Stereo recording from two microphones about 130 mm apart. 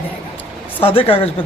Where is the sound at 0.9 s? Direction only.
45° left (ahead or behind).